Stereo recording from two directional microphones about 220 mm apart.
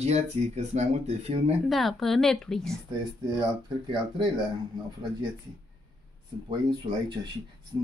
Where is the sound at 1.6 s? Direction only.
Centre (ahead or behind).